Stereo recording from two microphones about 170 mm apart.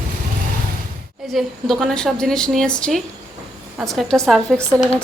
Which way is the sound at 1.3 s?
Centre (ahead or behind).